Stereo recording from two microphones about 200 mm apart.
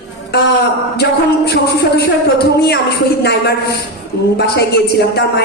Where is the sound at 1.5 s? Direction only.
55° left (ahead or behind).